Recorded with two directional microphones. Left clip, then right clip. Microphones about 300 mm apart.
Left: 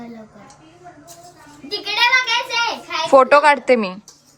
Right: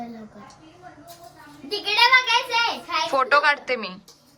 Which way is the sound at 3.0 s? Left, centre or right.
Centre.